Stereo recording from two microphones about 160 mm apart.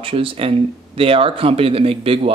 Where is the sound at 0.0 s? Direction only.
35° right (ahead or behind).